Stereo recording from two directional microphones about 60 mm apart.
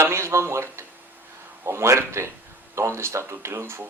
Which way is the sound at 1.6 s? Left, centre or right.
Right.